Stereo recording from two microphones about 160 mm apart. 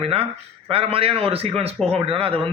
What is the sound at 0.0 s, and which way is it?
A man's voice, 35° right (ahead or behind).